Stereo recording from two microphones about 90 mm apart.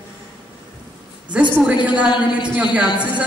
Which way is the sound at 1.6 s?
15° right (ahead or behind).